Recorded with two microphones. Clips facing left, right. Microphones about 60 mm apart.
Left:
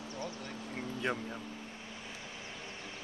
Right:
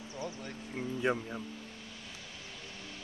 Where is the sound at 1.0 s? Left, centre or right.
Centre.